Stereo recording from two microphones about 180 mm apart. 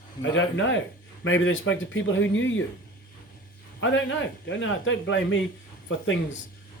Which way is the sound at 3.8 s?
90° left.